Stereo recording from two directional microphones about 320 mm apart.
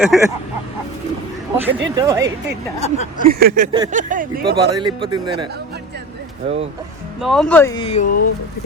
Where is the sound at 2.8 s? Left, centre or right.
Left.